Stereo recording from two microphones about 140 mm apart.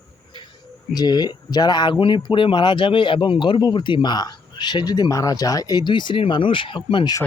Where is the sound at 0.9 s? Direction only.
30° left (ahead or behind).